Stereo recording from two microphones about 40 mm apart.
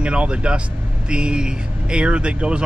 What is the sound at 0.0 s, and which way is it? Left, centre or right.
Speech, right.